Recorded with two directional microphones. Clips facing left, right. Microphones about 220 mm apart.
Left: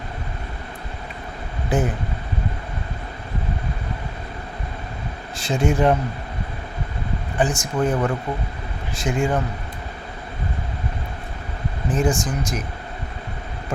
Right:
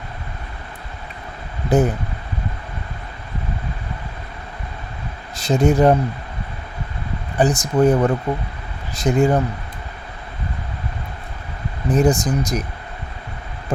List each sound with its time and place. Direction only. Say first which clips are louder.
1.7 s speech: right 5 dB; 40° right (ahead or behind)
5.4 s speech: right 5 dB; 40° right (ahead or behind)
7.3 s speech: right 5 dB; 35° right (ahead or behind)
11.9 s speech: right 5 dB; 40° right (ahead or behind)